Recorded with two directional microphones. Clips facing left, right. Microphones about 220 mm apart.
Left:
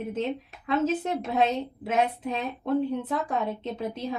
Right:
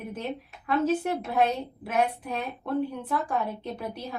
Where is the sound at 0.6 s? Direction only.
20° left (ahead or behind).